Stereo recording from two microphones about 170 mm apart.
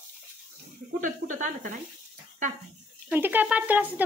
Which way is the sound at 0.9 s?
50° right (ahead or behind).